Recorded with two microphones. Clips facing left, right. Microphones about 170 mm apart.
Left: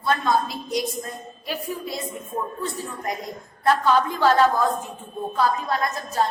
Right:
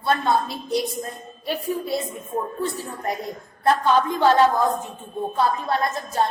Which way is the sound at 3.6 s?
20° right (ahead or behind).